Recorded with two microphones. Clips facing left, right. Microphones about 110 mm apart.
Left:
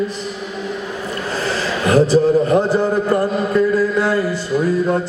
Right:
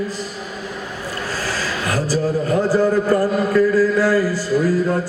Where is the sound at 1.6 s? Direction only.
25° left (ahead or behind).